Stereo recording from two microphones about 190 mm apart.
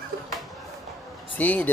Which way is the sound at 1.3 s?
10° left (ahead or behind).